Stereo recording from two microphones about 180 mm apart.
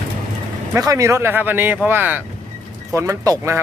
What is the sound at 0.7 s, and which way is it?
Speech, 20° right (ahead or behind).